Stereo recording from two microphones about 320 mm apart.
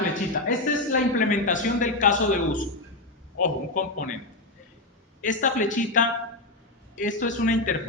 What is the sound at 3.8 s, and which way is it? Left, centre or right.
Speech, left.